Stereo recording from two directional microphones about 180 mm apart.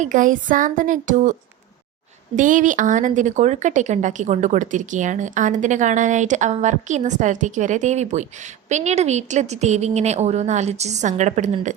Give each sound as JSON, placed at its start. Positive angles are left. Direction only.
{"t": 0.0, "sound": "a woman's voice", "side_deg": -45}